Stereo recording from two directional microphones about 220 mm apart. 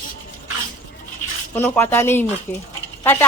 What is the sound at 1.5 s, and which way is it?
Speech, 10° left (ahead or behind).